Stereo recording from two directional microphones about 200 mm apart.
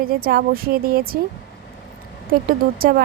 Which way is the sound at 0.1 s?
50° right (ahead or behind).